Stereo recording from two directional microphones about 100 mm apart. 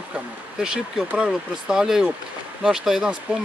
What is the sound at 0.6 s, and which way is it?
Speech, 5° right (ahead or behind).